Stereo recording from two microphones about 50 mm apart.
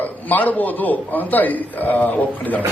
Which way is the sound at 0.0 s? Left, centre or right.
Left.